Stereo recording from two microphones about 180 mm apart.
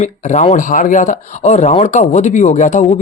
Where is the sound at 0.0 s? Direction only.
40° left (ahead or behind).